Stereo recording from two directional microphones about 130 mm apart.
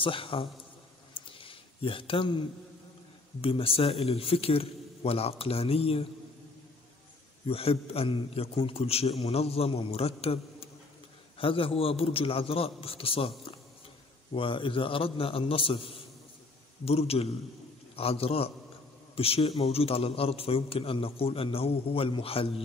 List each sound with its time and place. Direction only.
0.0 s a man's voice: 45° left (ahead or behind)
1.1 s a sound: 40° left (ahead or behind)
3.3 s a man's voice: 45° left (ahead or behind)
7.4 s a man's voice: 50° left (ahead or behind)